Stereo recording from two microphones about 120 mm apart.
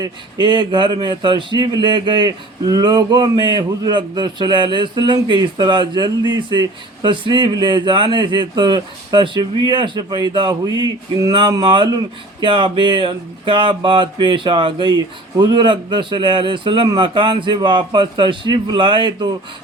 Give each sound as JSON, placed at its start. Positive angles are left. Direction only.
{"t": 0.0, "sound": "a man's voice", "side_deg": -40}